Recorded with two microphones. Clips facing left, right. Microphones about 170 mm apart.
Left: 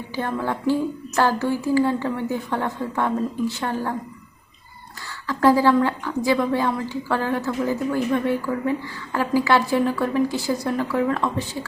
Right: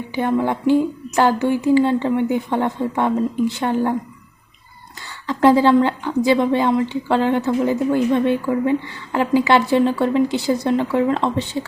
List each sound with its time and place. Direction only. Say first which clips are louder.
0.2 s speech: right 6 dB; 20° right (ahead or behind)
5.3 s speech: right 3 dB; 20° right (ahead or behind)